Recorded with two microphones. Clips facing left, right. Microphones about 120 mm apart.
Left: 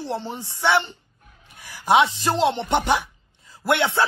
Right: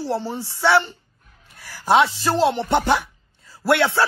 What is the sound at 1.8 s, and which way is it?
Speech, 20° left (ahead or behind).